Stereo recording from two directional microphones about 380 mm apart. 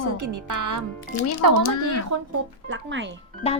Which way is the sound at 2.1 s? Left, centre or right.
Right.